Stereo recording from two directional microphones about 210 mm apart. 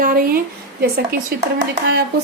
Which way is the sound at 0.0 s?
40° right (ahead or behind).